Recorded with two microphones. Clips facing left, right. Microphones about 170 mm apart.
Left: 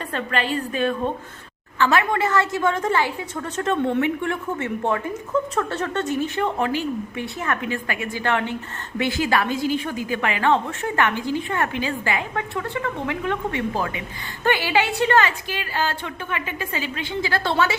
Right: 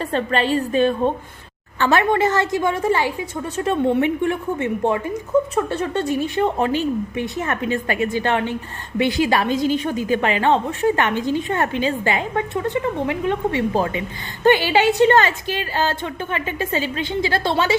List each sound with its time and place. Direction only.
0.0 s a woman's voice: 30° right (ahead or behind)